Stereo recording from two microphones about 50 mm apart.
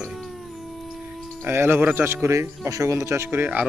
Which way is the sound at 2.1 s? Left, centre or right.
Right.